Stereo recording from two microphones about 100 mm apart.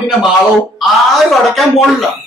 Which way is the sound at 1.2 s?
Centre (ahead or behind).